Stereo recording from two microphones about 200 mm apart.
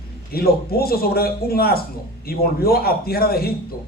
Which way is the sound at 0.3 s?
50° left (ahead or behind).